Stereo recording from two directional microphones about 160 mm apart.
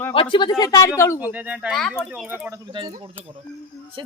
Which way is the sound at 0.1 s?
30° left (ahead or behind).